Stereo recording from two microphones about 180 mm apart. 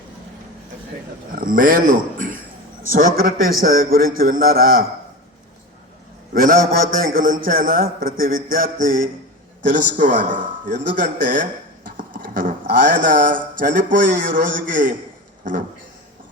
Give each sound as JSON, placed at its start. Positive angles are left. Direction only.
{"t": 1.4, "sound": "a man's voice", "side_deg": -50}
{"t": 6.3, "sound": "a man's voice", "side_deg": -50}